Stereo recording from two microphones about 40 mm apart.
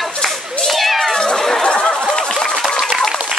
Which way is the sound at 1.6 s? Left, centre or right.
Left.